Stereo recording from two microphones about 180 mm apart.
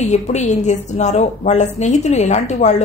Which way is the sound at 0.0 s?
40° left (ahead or behind).